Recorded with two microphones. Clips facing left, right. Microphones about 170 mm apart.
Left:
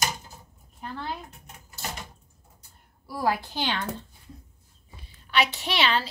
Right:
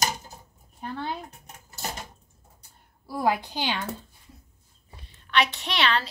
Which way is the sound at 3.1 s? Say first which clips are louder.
Right 2 dB; 20° right (ahead or behind).